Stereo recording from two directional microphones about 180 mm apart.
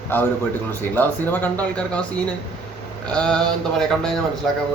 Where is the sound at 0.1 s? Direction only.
10° left (ahead or behind).